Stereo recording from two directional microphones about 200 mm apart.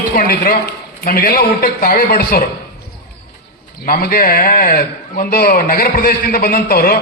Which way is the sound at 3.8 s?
50° left (ahead or behind).